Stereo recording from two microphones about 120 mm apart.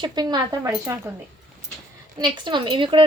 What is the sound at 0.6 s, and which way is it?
Speech, 20° right (ahead or behind).